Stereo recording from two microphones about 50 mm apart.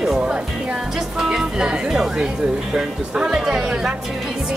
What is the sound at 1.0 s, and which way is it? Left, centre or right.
Speech, centre.